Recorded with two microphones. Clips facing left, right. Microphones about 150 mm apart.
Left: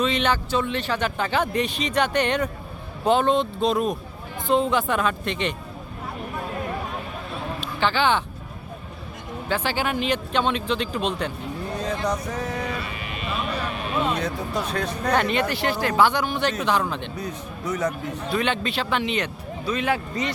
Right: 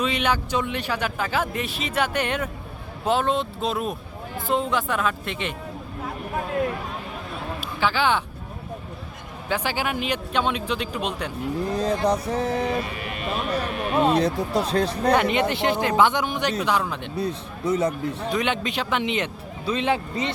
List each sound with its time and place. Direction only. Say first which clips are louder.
0.0 s a man's voice: left 1 dB; 10° right (ahead or behind)
7.6 s speech: left 1 dB; 5° right (ahead or behind)
9.5 s a man's voice: left 1 dB; 15° right (ahead or behind)
11.8 s speech: right 3 dB; 35° right (ahead or behind); by 13.4 s 50° right (ahead or behind)
14.0 s speech: right 7 dB; 35° right (ahead or behind)
15.1 s speech: even; 15° right (ahead or behind)
17.2 s speech: right 4 dB; 30° right (ahead or behind)
18.3 s speech: left 2 dB; 15° right (ahead or behind)